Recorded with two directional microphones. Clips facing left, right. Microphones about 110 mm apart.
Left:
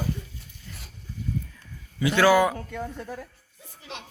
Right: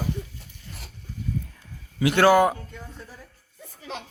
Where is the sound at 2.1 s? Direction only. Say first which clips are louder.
Right 2 dB; 50° right (ahead or behind).